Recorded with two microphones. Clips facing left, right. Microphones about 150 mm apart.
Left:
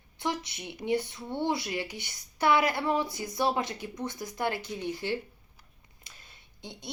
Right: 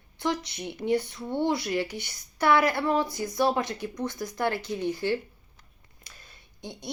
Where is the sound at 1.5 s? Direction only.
20° left (ahead or behind).